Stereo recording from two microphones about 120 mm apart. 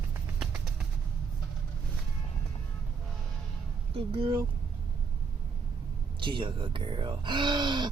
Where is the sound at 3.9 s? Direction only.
55° right (ahead or behind).